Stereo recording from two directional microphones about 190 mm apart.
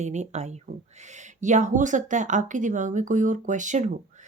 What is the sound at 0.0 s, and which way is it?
Speech, 35° right (ahead or behind).